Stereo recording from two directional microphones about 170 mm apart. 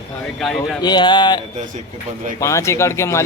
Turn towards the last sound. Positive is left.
turn(degrees=15)  # may be behind; listen again after turning